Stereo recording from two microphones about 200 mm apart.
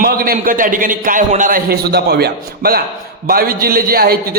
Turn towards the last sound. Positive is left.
turn(degrees=-50)  # may be behind; listen again after turning